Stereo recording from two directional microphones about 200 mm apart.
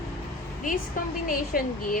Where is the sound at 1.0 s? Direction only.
45° left (ahead or behind).